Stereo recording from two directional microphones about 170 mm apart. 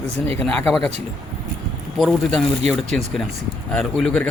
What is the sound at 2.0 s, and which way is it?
Speech, centre (ahead or behind).